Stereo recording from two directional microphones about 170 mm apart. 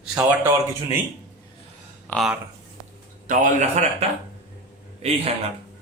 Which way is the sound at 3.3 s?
45° right (ahead or behind).